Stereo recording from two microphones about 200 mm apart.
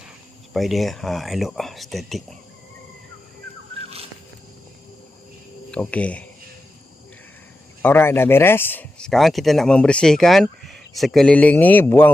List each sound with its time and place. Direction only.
0.5 s speech: centre (ahead or behind)
3.8 s wild animals: 30° right (ahead or behind)
5.7 s cricket: 5° left (ahead or behind)
7.8 s speech: 10° left (ahead or behind)